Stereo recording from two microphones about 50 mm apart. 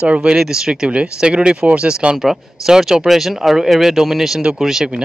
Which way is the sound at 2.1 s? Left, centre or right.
Centre.